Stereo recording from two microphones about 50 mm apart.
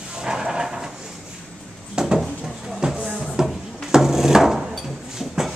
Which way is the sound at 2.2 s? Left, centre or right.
Centre.